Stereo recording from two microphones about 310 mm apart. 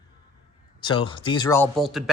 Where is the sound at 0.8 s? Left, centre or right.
Centre.